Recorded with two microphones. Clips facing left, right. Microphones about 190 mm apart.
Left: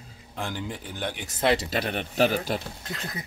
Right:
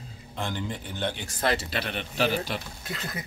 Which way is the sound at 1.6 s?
45° left (ahead or behind).